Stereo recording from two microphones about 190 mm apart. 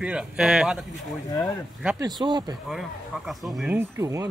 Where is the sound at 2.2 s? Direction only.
20° right (ahead or behind).